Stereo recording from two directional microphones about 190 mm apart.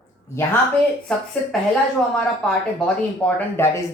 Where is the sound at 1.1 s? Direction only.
5° left (ahead or behind).